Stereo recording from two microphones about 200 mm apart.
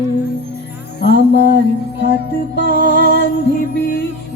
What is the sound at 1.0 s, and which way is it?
Music, 55° left (ahead or behind).